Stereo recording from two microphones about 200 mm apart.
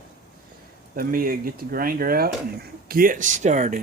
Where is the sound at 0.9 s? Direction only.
45° right (ahead or behind).